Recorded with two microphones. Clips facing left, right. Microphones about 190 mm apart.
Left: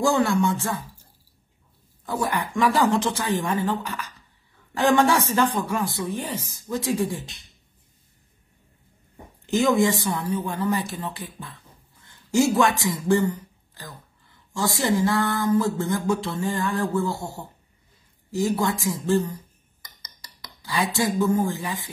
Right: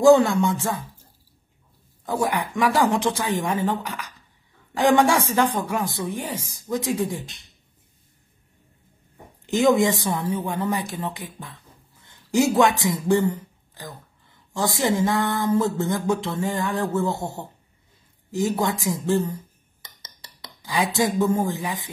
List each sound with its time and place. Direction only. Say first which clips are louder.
0.0 s speech: right 6 dB; 20° right (ahead or behind)
2.0 s speech: right 2 dB; 15° right (ahead or behind)
9.5 s speech: right 2 dB; 20° right (ahead or behind)